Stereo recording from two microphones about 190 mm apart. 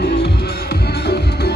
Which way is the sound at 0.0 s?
60° left (ahead or behind).